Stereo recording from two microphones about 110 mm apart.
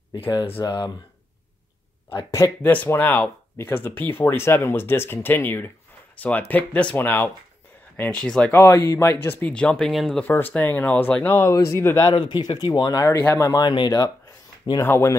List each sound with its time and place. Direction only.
0.3 s speech: 45° left (ahead or behind)
2.0 s speech: 25° left (ahead or behind)
8.5 s speech: 20° left (ahead or behind); by 10.2 s 5° left (ahead or behind)
10.2 s speech: 15° left (ahead or behind)
11.3 s speech: 25° left (ahead or behind)
12.1 s speech: 40° left (ahead or behind)
13.1 s speech: 20° left (ahead or behind)
13.7 s speech: 40° left (ahead or behind)
14.8 s speech: 25° left (ahead or behind)